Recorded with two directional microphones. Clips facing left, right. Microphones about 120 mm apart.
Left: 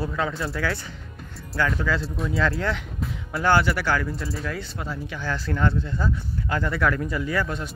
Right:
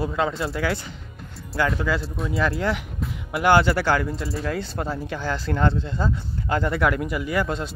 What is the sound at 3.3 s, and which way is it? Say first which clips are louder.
Speech: right 3 dB; 20° right (ahead or behind).